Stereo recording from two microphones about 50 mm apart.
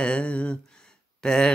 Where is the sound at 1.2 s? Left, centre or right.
Centre.